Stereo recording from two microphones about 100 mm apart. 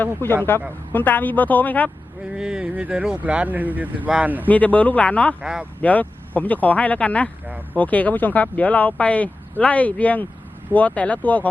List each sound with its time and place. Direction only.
0.0 s speech: 20° left (ahead or behind)
2.3 s speech: 5° right (ahead or behind)
4.4 s speech: 15° left (ahead or behind)
5.4 s speech: 10° right (ahead or behind)
5.8 s speech: 15° left (ahead or behind)
7.4 s speech: 15° right (ahead or behind)
7.8 s speech: 15° left (ahead or behind)